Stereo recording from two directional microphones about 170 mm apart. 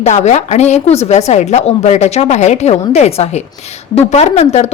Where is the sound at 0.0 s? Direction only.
45° left (ahead or behind).